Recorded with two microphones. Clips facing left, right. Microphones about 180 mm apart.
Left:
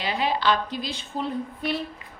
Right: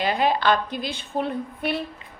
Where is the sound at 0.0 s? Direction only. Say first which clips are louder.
Right 3 dB; 50° right (ahead or behind).